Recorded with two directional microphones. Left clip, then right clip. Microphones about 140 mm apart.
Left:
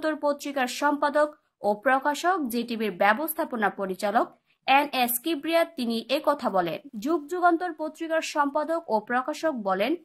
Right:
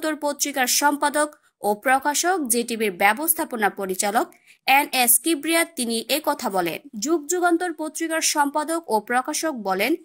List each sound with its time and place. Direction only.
0.0 s speech: 25° right (ahead or behind)